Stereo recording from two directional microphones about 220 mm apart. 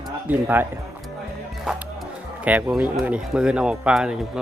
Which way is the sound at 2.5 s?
5° right (ahead or behind).